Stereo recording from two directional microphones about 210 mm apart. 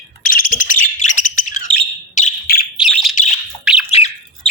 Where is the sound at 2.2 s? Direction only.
45° left (ahead or behind).